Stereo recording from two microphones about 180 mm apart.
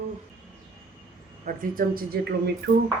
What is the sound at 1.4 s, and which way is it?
Speech, 50° right (ahead or behind).